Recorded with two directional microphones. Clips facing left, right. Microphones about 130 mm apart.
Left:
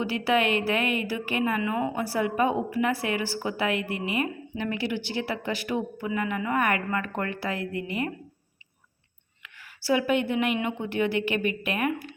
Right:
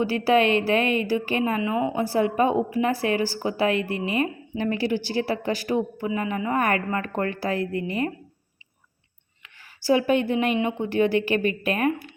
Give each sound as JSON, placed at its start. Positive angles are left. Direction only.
{"t": 0.0, "sound": "a woman's voice", "side_deg": -35}
{"t": 9.4, "sound": "a woman's voice", "side_deg": -30}